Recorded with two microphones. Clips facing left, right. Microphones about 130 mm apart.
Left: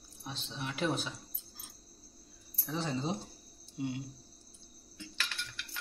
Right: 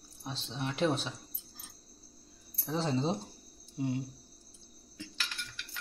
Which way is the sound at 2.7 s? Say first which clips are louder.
Right 4 dB; 30° right (ahead or behind).